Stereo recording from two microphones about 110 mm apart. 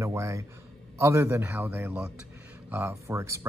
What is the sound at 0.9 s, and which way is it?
A woman's voice, 25° right (ahead or behind).